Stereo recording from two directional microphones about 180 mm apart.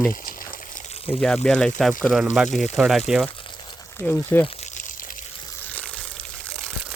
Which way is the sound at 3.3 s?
25° left (ahead or behind).